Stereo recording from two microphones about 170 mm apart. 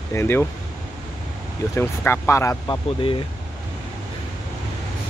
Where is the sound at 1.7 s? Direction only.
15° left (ahead or behind).